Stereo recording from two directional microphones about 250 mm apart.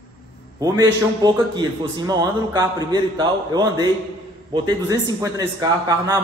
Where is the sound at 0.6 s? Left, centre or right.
Centre.